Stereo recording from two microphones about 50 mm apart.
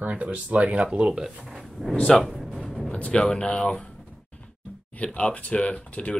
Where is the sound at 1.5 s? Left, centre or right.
Centre.